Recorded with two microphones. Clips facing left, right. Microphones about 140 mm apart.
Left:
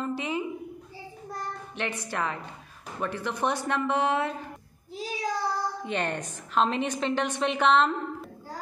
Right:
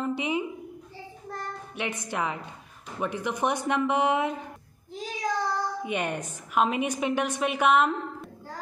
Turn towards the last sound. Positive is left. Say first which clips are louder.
# even
turn(degrees=-10)  # may be behind; listen again after turning